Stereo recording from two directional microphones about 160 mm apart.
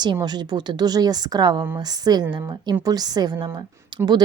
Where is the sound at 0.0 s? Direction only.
25° right (ahead or behind).